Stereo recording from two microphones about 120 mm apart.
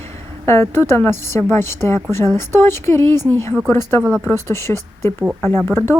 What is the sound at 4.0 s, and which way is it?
Speech, 5° right (ahead or behind).